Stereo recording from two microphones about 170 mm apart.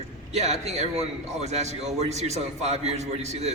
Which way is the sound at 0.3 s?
40° right (ahead or behind).